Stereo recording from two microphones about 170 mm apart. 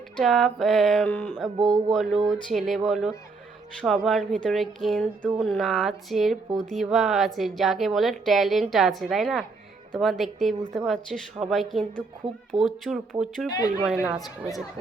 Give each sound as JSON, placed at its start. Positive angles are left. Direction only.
{"t": 0.2, "sound": "a woman's voice", "side_deg": 0}
{"t": 13.5, "sound": "speech", "side_deg": 20}
{"t": 13.8, "sound": "a woman's voice", "side_deg": -5}